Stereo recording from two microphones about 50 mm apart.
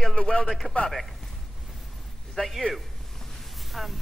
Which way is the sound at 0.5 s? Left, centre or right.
Centre.